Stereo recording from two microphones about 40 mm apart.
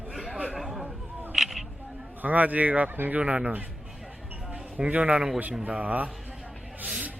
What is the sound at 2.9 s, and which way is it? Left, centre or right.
Speech, right.